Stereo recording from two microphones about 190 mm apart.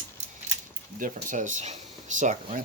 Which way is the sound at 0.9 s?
45° right (ahead or behind).